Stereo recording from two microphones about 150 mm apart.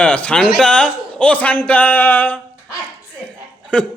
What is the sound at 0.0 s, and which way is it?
A man's voice, 10° left (ahead or behind).